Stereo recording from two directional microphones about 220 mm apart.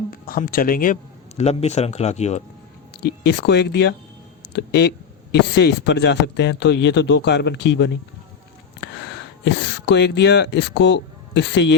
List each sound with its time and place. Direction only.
0.1 s speech: 40° left (ahead or behind)
3.0 s speech: 50° left (ahead or behind)